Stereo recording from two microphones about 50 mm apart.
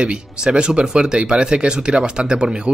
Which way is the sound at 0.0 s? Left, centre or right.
Centre.